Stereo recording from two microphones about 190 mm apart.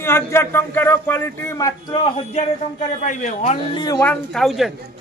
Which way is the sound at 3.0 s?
40° left (ahead or behind).